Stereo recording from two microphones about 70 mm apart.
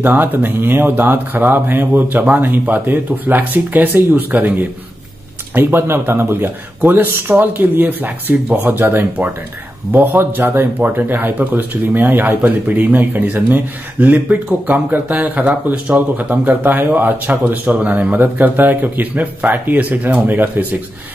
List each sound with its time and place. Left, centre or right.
0.0 s speech: right